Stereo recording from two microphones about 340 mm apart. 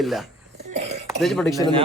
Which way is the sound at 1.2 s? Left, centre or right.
Centre.